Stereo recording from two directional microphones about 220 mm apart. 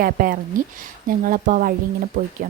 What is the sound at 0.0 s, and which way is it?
Speech, 40° right (ahead or behind).